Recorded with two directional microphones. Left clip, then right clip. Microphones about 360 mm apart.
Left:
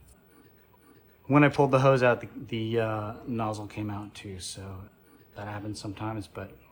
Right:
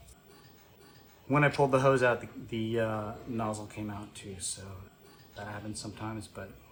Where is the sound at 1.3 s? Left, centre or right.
Left.